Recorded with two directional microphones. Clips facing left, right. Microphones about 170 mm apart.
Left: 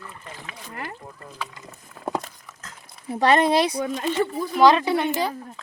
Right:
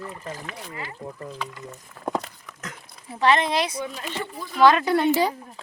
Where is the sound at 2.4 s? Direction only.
75° right (ahead or behind).